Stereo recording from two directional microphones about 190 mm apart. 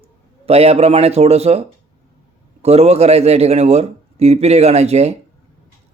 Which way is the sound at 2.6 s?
35° right (ahead or behind).